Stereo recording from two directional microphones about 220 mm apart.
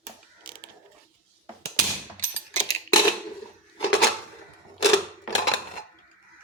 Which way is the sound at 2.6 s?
15° left (ahead or behind).